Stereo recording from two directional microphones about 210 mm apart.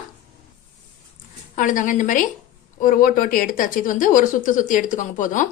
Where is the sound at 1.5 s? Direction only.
40° left (ahead or behind).